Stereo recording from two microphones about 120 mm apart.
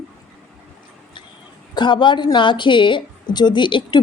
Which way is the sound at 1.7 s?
40° left (ahead or behind).